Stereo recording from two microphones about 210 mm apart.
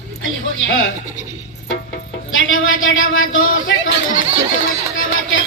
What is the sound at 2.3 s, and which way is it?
A man's voice, 70° left (ahead or behind).